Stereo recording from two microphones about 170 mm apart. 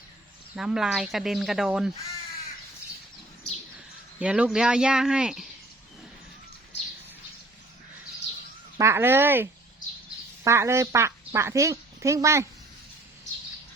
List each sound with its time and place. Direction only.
0.5 s a woman's voice: 5° right (ahead or behind)
4.2 s a woman's voice: 5° right (ahead or behind)
8.8 s speech: 15° right (ahead or behind)